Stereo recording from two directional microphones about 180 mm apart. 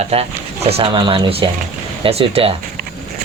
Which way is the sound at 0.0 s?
35° right (ahead or behind).